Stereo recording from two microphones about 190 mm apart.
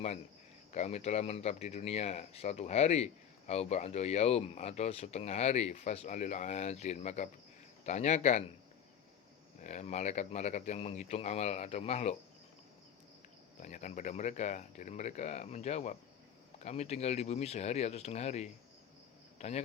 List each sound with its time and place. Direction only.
0.7 s speech: 35° left (ahead or behind)
9.6 s speech: 40° left (ahead or behind)
13.6 s a man's voice: 40° left (ahead or behind)